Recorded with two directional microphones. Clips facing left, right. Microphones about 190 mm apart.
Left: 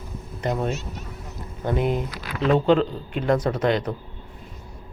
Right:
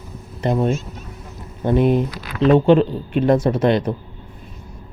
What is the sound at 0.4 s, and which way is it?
Speech, 25° right (ahead or behind).